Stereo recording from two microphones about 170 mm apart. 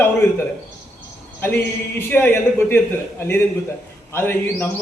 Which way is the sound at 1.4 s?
15° left (ahead or behind).